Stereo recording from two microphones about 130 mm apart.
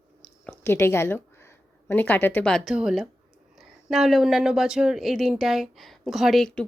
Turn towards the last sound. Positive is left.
turn(degrees=5)  # may be behind; listen again after turning